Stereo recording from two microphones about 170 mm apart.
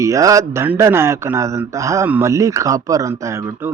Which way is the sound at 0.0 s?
20° right (ahead or behind).